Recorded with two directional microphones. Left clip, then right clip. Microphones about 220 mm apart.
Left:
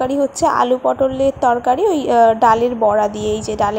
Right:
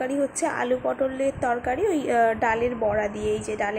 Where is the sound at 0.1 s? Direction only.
15° left (ahead or behind).